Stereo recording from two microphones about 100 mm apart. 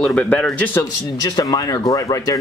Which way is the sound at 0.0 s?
15° left (ahead or behind).